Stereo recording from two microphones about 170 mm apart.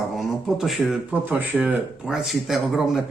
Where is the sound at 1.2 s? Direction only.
10° right (ahead or behind).